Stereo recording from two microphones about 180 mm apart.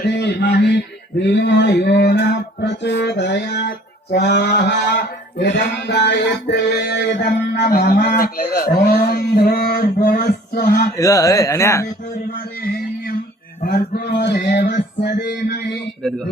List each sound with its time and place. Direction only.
0.1 s speech: 70° left (ahead or behind)
1.3 s music: 75° left (ahead or behind)
8.8 s a sound: 60° left (ahead or behind)
10.9 s speech: 20° left (ahead or behind)
13.6 s music: 55° left (ahead or behind)
16.0 s speech: centre (ahead or behind)